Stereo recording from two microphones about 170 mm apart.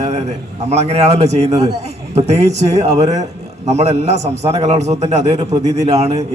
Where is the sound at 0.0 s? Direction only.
40° right (ahead or behind).